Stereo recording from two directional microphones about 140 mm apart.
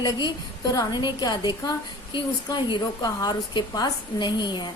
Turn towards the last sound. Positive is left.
turn(degrees=30)  # may be behind; listen again after turning